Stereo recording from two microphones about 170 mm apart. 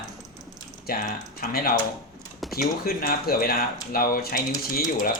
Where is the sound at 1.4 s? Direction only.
60° left (ahead or behind).